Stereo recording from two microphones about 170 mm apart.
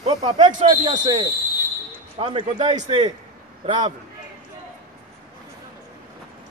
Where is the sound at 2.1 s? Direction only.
35° right (ahead or behind).